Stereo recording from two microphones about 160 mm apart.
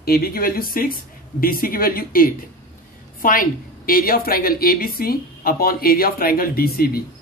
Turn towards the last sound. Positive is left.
turn(degrees=70)  # may be behind; listen again after turning